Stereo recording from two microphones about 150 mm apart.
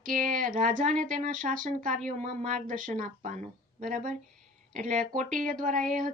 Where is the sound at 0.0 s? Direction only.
65° right (ahead or behind).